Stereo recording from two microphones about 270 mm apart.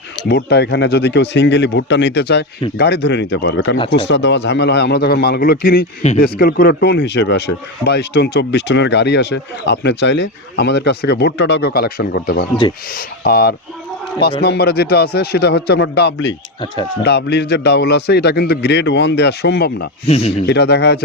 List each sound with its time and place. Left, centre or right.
0.3 s speech: left
20.1 s speech: left
20.5 s speech: left